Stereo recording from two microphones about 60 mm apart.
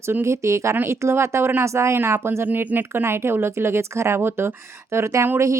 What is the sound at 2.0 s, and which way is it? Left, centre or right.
Speech, right.